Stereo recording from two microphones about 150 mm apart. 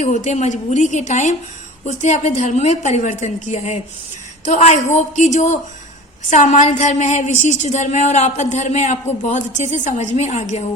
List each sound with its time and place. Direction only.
0.0 s a woman's voice: 50° left (ahead or behind)